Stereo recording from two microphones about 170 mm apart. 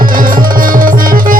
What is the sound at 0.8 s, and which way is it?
Music, 55° right (ahead or behind).